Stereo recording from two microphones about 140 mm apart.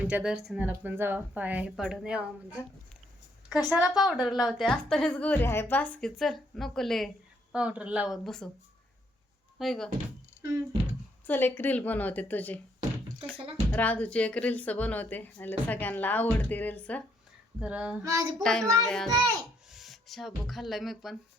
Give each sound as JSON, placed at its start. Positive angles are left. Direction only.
{"t": 0.0, "sound": "a woman's voice", "side_deg": -10}
{"t": 3.7, "sound": "a woman's voice", "side_deg": -5}
{"t": 9.6, "sound": "a woman's voice", "side_deg": 0}
{"t": 11.3, "sound": "speech", "side_deg": 15}
{"t": 13.7, "sound": "speech", "side_deg": 10}
{"t": 17.6, "sound": "speech", "side_deg": -10}
{"t": 18.0, "sound": "a sound", "side_deg": -25}
{"t": 18.4, "sound": "a woman's voice", "side_deg": 5}
{"t": 19.1, "sound": "a sound", "side_deg": -25}
{"t": 19.7, "sound": "speech", "side_deg": 0}